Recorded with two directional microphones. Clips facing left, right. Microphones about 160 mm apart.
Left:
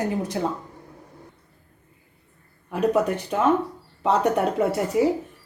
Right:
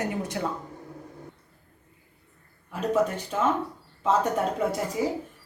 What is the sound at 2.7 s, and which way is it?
Speech, 65° left (ahead or behind).